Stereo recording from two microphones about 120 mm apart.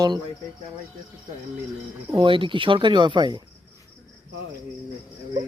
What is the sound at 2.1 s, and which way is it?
Speech, 45° right (ahead or behind).